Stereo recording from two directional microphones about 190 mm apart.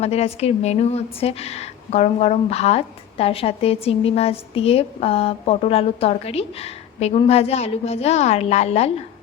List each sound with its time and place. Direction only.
0.0 s a woman's voice: 35° left (ahead or behind)